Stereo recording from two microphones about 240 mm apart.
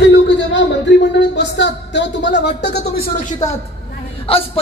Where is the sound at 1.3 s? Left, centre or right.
Left.